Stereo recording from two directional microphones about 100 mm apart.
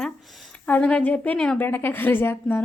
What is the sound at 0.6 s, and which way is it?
A woman's voice, 15° left (ahead or behind).